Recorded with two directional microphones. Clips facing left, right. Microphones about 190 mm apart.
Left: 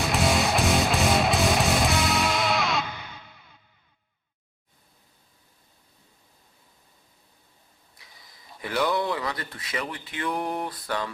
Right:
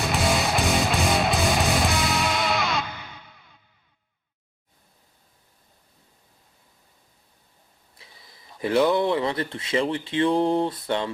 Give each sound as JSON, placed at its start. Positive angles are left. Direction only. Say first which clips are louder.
{"t": 0.0, "sound": "music", "louder": "even", "side_deg": 0}
{"t": 7.9, "sound": "speech", "louder": "right 3 dB", "side_deg": -25}